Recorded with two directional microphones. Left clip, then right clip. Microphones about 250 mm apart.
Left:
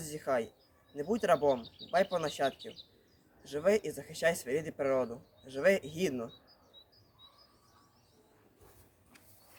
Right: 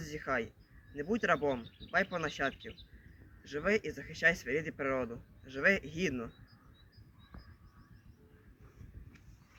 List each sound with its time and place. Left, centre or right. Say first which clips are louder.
0.0 s speech: left 2 dB; left